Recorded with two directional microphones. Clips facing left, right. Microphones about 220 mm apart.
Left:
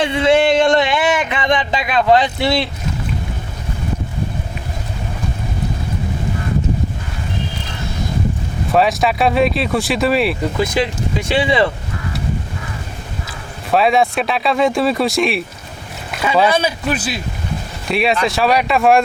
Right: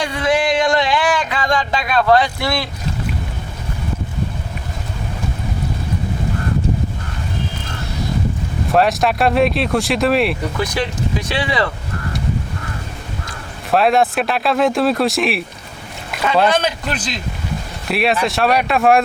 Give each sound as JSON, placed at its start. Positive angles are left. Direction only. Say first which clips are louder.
{"t": 0.0, "sound": "a sound", "louder": "left 4 dB", "side_deg": 25}
{"t": 8.7, "sound": "speech", "louder": "even", "side_deg": 0}
{"t": 11.3, "sound": "speech", "louder": "left 6 dB", "side_deg": 25}
{"t": 13.2, "sound": "speech", "louder": "left 1 dB", "side_deg": 0}